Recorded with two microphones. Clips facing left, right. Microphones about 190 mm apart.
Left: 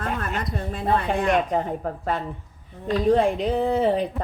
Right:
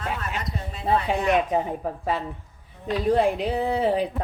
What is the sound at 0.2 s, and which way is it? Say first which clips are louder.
Speech: left 3 dB; 50° left (ahead or behind).